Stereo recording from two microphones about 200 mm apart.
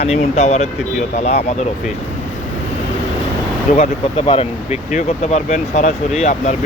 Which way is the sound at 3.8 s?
30° left (ahead or behind).